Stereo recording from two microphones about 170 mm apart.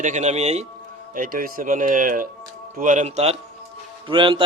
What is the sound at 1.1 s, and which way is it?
Speech, 55° right (ahead or behind).